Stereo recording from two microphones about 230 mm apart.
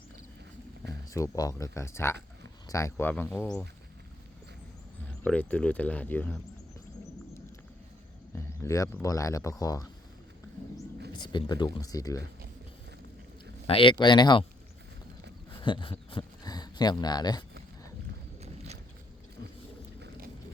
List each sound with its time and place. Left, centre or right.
1.1 s speech: centre
5.0 s speech: centre
8.4 s speech: centre
11.1 s speech: centre
13.7 s speech: left
15.6 s speech: left
18.3 s a sound: right
20.0 s boat: right